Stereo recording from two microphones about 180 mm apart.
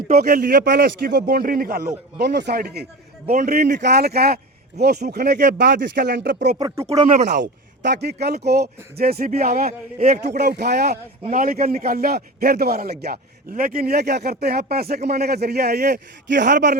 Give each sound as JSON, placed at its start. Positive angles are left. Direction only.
{"t": 0.3, "sound": "speech", "side_deg": -50}
{"t": 2.1, "sound": "a man's voice", "side_deg": -70}
{"t": 3.8, "sound": "a man's voice", "side_deg": -70}
{"t": 6.6, "sound": "speech", "side_deg": -20}
{"t": 6.8, "sound": "speech", "side_deg": -40}
{"t": 7.4, "sound": "a man's voice", "side_deg": -70}
{"t": 11.3, "sound": "a man's voice", "side_deg": -50}